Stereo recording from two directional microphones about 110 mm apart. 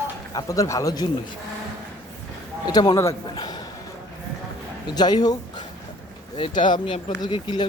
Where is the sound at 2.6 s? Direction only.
40° left (ahead or behind).